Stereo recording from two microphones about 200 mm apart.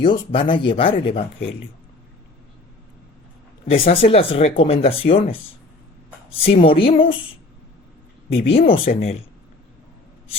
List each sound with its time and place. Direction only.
0.0 s speech: 25° left (ahead or behind)
3.8 s speech: 30° left (ahead or behind)
6.4 s speech: 25° left (ahead or behind)
8.3 s speech: 30° left (ahead or behind)